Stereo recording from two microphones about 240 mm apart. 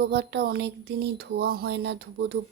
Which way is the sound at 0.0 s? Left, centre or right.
Right.